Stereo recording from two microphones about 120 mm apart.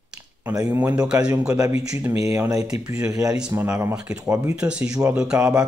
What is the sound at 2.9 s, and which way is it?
Speech, 5° right (ahead or behind).